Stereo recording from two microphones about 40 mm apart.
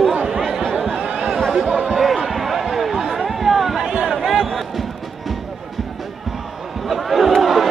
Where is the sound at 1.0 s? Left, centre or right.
Right.